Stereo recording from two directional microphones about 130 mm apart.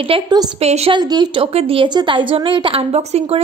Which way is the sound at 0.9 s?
35° right (ahead or behind).